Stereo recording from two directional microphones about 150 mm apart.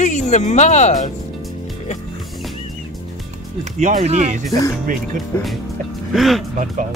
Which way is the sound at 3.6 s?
55° right (ahead or behind).